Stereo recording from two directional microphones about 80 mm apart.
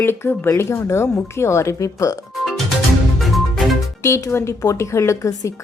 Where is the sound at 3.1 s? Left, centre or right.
Centre.